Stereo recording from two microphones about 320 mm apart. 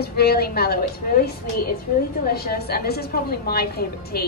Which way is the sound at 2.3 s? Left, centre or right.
Left.